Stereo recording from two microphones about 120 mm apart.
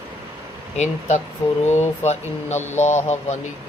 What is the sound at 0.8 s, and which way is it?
Speech, 75° left (ahead or behind).